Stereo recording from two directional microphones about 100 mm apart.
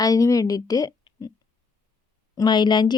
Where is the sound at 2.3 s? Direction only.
45° left (ahead or behind).